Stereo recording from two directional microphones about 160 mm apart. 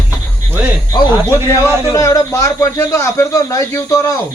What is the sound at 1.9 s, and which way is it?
Speech, 20° left (ahead or behind).